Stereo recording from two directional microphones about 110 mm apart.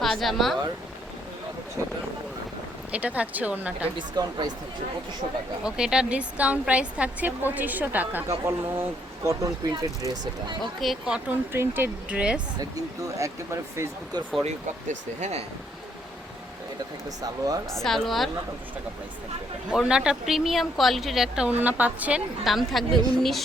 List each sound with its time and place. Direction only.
0.0 s speech: centre (ahead or behind)
1.8 s speech: 30° right (ahead or behind)
2.9 s speech: 15° right (ahead or behind)
3.9 s speech: 40° right (ahead or behind)
5.6 s speech: 5° right (ahead or behind)
8.3 s speech: 25° right (ahead or behind)
10.8 s speech: 5° right (ahead or behind)
11.5 s speech: 20° right (ahead or behind)
12.5 s speech: 30° right (ahead or behind)
15.2 s speech: 75° right (ahead or behind)
17.8 s speech: 5° left (ahead or behind)
19.7 s speech: 5° right (ahead or behind)
21.6 s speech: 15° right (ahead or behind)
22.4 s speech: centre (ahead or behind)